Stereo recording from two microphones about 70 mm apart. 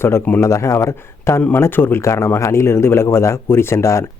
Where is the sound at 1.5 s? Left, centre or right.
Left.